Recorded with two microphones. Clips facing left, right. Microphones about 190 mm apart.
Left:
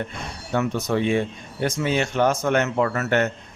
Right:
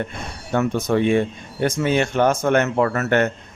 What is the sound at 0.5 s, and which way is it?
Speech, 50° right (ahead or behind).